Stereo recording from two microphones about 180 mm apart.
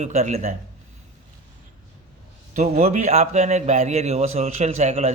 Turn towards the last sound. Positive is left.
turn(degrees=-40)  # may be behind; listen again after turning